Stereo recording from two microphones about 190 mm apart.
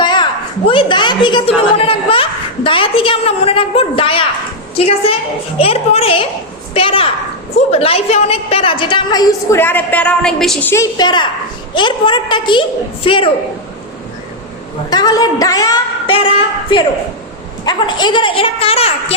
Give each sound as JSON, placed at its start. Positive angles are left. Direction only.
{"t": 0.0, "sound": "a sound", "side_deg": 25}
{"t": 0.7, "sound": "a woman's voice", "side_deg": 25}
{"t": 10.7, "sound": "a woman's voice", "side_deg": 20}
{"t": 14.8, "sound": "a woman's voice", "side_deg": 20}
{"t": 17.7, "sound": "a woman's voice", "side_deg": 25}